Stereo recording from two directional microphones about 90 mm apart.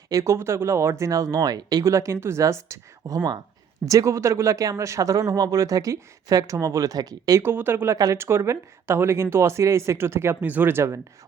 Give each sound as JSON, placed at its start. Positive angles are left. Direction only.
{"t": 0.1, "sound": "speech", "side_deg": -35}
{"t": 7.4, "sound": "speech", "side_deg": -25}
{"t": 7.9, "sound": "speech", "side_deg": -40}